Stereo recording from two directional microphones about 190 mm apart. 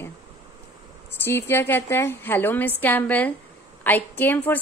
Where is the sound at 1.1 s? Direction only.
10° left (ahead or behind).